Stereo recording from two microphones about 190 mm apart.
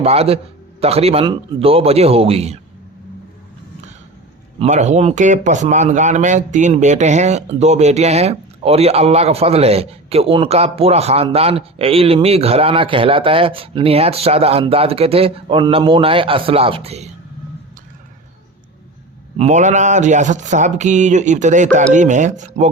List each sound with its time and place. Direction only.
0.0 s speech: 35° right (ahead or behind)
4.6 s speech: 35° right (ahead or behind)
19.4 s speech: 40° right (ahead or behind)